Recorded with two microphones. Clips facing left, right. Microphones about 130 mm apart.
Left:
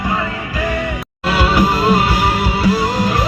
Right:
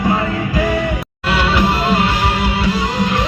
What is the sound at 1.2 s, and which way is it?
Music, 10° left (ahead or behind).